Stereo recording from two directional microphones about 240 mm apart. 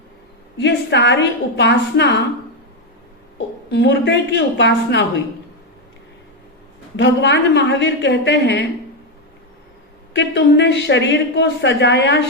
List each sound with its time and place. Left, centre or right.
0.6 s a woman's voice: left
3.3 s a woman's voice: left
6.9 s a woman's voice: left
10.1 s a woman's voice: left